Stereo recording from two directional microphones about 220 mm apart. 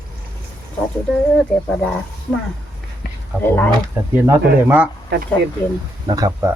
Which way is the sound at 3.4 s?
10° left (ahead or behind).